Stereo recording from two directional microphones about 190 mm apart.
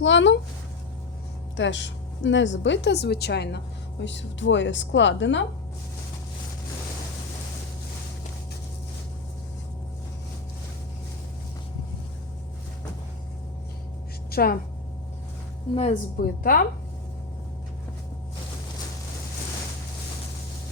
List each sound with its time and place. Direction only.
0.0 s a woman's voice: 75° left (ahead or behind)
1.5 s a woman's voice: 70° left (ahead or behind)
14.3 s a sound: 55° left (ahead or behind)
15.7 s speech: 35° left (ahead or behind)
16.1 s a woman's voice: 50° left (ahead or behind)